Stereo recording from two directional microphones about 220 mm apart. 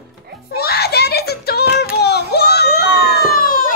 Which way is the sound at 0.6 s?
45° left (ahead or behind).